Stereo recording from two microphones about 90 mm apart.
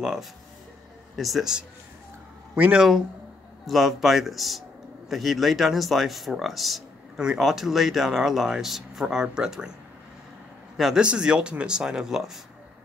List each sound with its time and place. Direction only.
0.0 s speech: 5° right (ahead or behind)
2.5 s speech: 15° right (ahead or behind)
3.6 s speech: centre (ahead or behind)
10.8 s speech: 5° right (ahead or behind)